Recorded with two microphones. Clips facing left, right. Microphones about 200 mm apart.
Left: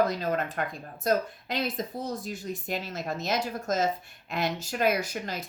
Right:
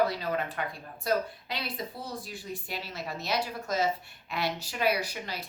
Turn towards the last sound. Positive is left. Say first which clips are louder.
# left 3 dB
turn(degrees=45)  # may be behind; listen again after turning